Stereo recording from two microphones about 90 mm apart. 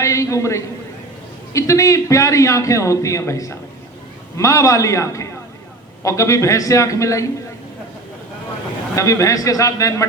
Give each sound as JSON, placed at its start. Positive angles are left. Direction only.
{"t": 0.0, "sound": "a man's voice", "side_deg": 35}
{"t": 9.0, "sound": "a man's voice", "side_deg": 40}